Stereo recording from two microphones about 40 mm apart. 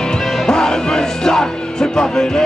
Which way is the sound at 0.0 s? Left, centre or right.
Centre.